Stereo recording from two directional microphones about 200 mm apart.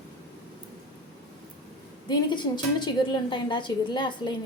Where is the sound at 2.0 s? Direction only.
20° left (ahead or behind).